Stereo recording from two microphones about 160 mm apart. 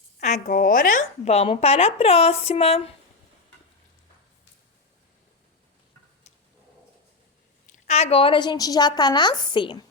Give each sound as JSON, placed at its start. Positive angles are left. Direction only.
{"t": 0.2, "sound": "speech", "side_deg": 50}
{"t": 7.7, "sound": "a woman's voice", "side_deg": 45}